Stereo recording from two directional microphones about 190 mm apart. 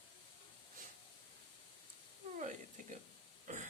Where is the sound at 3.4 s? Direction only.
40° right (ahead or behind).